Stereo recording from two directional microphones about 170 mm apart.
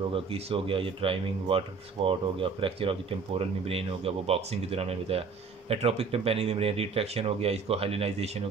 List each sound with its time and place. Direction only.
0.1 s speech: 35° right (ahead or behind)